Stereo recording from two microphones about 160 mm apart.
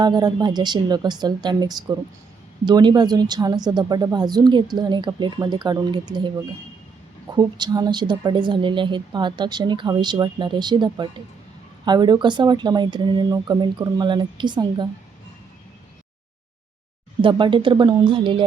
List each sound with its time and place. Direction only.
0.0 s a woman's voice: 25° right (ahead or behind)
7.3 s a woman's voice: 25° right (ahead or behind)
17.2 s speech: 30° right (ahead or behind)